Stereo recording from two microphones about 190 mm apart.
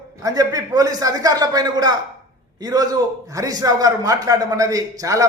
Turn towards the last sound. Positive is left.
turn(degrees=-15)  # may be behind; listen again after turning